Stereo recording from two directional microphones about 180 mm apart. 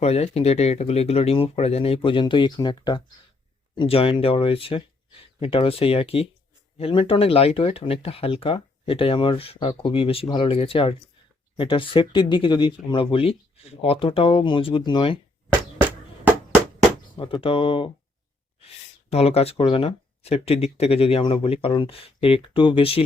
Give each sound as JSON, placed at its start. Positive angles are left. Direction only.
{"t": 0.0, "sound": "speech", "side_deg": 35}
{"t": 17.2, "sound": "speech", "side_deg": 30}
{"t": 19.1, "sound": "speech", "side_deg": 35}